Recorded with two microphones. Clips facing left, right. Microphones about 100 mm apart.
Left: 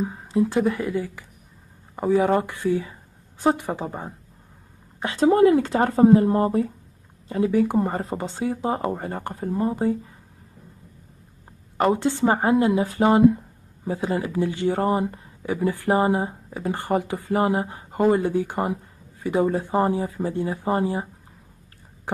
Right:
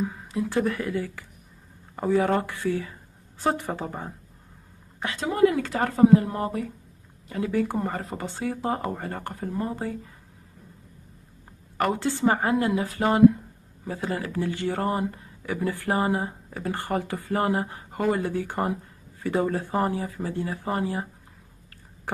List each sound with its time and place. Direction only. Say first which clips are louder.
0.0 s speech: left 6 dB; 25° left (ahead or behind)
0.6 s speech: left 3 dB; 15° left (ahead or behind)
5.0 s speech: left 5 dB; 30° left (ahead or behind)
11.8 s speech: left 3 dB; 20° left (ahead or behind)